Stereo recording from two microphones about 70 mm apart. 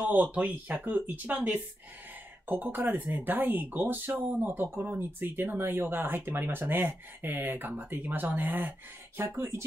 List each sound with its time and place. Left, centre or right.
0.0 s speech: right
9.2 s speech: right